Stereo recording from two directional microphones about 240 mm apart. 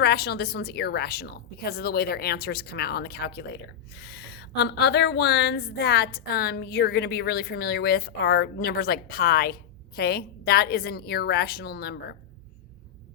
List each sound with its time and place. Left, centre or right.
0.0 s speech: left